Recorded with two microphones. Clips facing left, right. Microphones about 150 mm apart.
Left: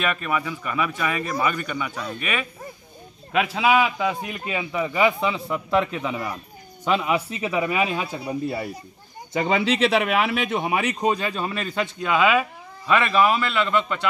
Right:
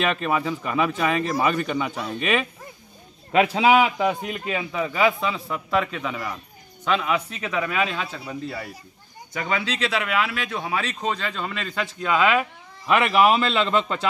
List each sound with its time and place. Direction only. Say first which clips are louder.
0.1 s speech: right 2 dB; 30° right (ahead or behind)
3.3 s speech: right 2 dB; 30° right (ahead or behind)
4.1 s a man's voice: right 1 dB; 5° left (ahead or behind)
13.2 s speech: right 2 dB; 25° right (ahead or behind)